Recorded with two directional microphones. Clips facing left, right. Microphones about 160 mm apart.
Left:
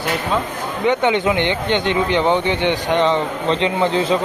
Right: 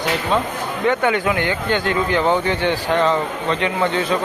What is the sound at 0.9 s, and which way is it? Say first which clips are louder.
Speech: left 2 dB; 20° left (ahead or behind).